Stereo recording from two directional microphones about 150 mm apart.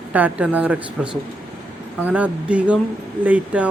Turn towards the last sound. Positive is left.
turn(degrees=-10)  # may be behind; listen again after turning